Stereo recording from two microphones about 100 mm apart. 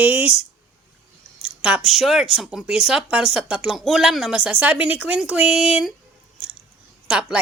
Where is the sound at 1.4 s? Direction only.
10° right (ahead or behind).